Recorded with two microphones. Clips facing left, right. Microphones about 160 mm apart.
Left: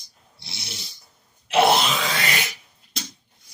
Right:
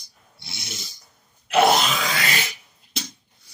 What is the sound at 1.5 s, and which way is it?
Grunt, 30° left (ahead or behind).